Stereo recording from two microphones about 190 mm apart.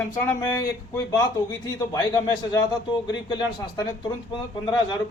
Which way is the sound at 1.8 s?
20° left (ahead or behind).